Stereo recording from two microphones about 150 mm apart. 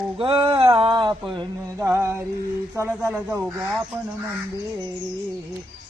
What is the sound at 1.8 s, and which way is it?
Mantra, 20° right (ahead or behind).